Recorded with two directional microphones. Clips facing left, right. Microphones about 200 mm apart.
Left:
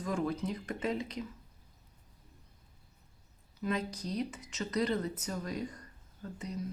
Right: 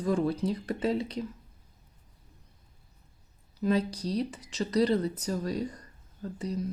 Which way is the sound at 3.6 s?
35° right (ahead or behind).